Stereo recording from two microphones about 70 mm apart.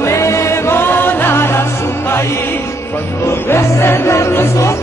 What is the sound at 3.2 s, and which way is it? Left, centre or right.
Music, left.